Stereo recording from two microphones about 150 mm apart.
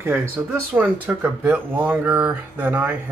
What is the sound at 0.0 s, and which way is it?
Speech, 15° right (ahead or behind).